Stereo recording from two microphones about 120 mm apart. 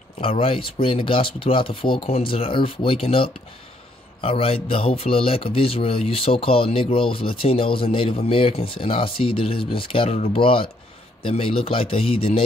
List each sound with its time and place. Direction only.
0.2 s a man's voice: 50° left (ahead or behind)